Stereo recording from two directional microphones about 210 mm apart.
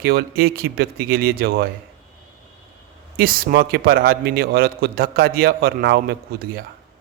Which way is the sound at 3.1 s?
45° right (ahead or behind).